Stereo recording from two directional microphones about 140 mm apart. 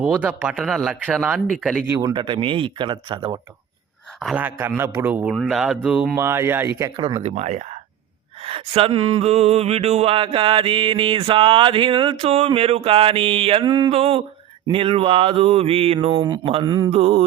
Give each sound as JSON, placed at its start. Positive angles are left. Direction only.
{"t": 0.0, "sound": "speech", "side_deg": -10}
{"t": 2.0, "sound": "a sound", "side_deg": -30}
{"t": 4.4, "sound": "speech", "side_deg": -15}
{"t": 5.3, "sound": "speech", "side_deg": 0}
{"t": 6.1, "sound": "speech", "side_deg": -15}
{"t": 7.1, "sound": "speech", "side_deg": -50}
{"t": 8.4, "sound": "a sound", "side_deg": -40}
{"t": 16.9, "sound": "speech", "side_deg": -45}